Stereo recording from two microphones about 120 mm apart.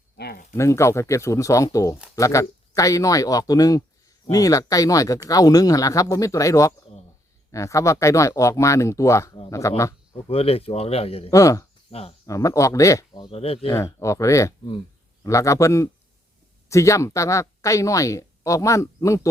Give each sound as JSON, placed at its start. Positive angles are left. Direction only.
{"t": 0.5, "sound": "speech", "side_deg": 25}
{"t": 10.2, "sound": "speech", "side_deg": 50}
{"t": 11.3, "sound": "speech", "side_deg": 25}
{"t": 11.9, "sound": "speech", "side_deg": 55}
{"t": 12.2, "sound": "speech", "side_deg": 30}
{"t": 13.3, "sound": "speech", "side_deg": 55}
{"t": 13.7, "sound": "speech", "side_deg": 25}